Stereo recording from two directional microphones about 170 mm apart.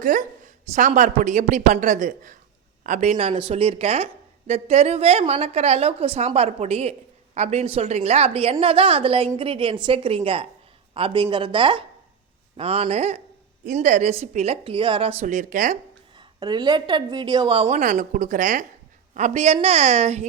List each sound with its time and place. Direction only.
0.0 s a woman's voice: 50° right (ahead or behind)
16.1 s a woman's voice: 25° right (ahead or behind)